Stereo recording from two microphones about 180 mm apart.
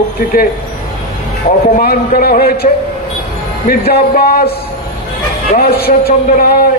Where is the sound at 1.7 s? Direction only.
55° left (ahead or behind).